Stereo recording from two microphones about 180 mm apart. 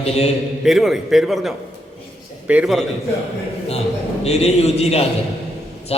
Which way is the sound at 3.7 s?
35° left (ahead or behind).